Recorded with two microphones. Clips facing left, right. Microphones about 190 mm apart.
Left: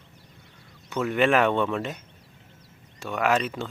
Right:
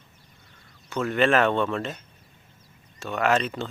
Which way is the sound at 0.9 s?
15° left (ahead or behind).